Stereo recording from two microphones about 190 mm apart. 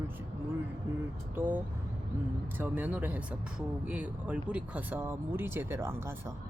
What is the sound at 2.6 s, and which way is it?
Speech, 10° right (ahead or behind).